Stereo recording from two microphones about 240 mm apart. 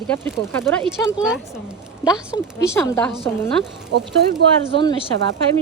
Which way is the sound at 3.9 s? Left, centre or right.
Right.